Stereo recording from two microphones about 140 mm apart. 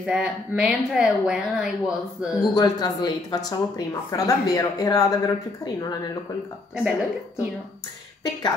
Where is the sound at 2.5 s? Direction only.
30° left (ahead or behind).